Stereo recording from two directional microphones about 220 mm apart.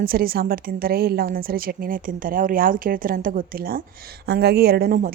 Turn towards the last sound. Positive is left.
turn(degrees=-40)  # may be behind; listen again after turning